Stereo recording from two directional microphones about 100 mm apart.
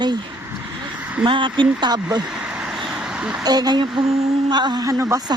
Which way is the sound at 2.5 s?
10° right (ahead or behind).